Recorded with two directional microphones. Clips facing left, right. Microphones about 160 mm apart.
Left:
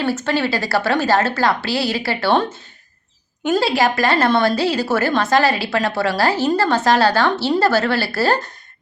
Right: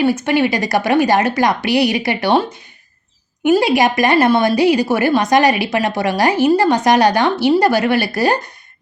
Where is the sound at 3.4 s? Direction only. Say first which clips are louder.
Right 4 dB; 15° right (ahead or behind).